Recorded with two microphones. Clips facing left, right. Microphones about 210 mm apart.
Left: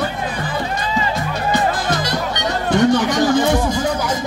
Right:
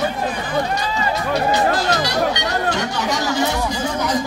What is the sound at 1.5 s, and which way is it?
Music, 50° left (ahead or behind).